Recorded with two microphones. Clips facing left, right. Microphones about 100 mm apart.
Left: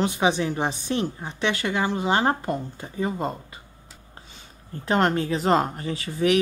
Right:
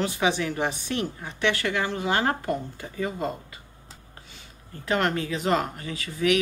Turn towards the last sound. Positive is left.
turn(degrees=35)  # may be behind; listen again after turning